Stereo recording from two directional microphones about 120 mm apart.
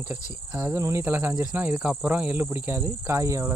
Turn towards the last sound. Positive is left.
turn(degrees=-25)  # may be behind; listen again after turning